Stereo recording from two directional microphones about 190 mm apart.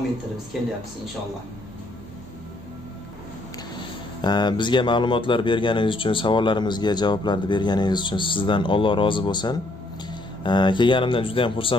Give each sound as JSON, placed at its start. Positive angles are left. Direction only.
{"t": 4.2, "sound": "speech", "side_deg": 20}